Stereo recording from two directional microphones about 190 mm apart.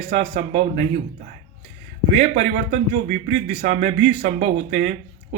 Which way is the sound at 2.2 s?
35° right (ahead or behind).